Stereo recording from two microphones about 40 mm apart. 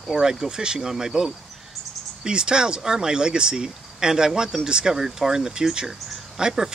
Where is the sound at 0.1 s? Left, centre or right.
Centre.